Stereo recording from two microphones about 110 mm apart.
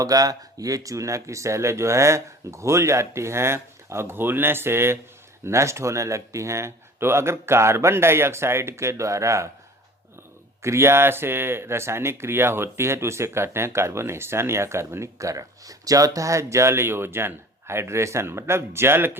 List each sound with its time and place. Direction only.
0.0 s speech: 35° right (ahead or behind)
10.6 s speech: 25° right (ahead or behind)